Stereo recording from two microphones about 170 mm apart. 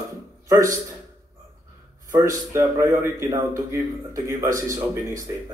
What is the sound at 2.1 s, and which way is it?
A man's voice, 20° right (ahead or behind).